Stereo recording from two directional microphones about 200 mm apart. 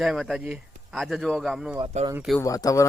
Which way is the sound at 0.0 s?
Centre (ahead or behind).